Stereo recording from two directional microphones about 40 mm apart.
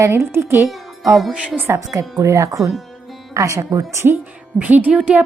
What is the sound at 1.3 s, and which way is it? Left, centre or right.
Speech, right.